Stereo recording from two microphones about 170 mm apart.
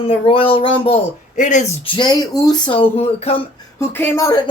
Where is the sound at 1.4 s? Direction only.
45° left (ahead or behind).